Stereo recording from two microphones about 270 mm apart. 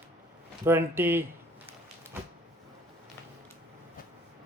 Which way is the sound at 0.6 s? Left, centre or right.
Centre.